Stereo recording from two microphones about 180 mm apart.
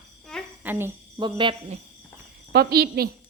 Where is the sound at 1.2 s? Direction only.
25° right (ahead or behind).